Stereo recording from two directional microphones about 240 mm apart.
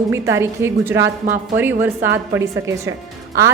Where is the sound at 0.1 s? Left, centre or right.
Centre.